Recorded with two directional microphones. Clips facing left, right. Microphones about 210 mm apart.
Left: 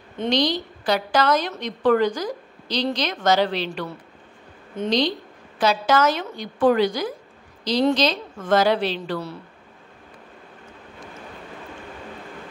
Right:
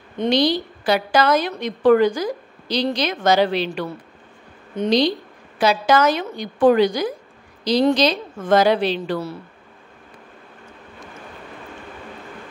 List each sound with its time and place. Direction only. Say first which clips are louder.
0.3 s a woman's voice: right 3 dB; 10° right (ahead or behind)
4.8 s a woman's voice: right 4 dB; 10° right (ahead or behind)